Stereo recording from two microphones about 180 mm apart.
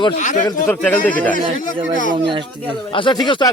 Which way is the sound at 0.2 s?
45° left (ahead or behind).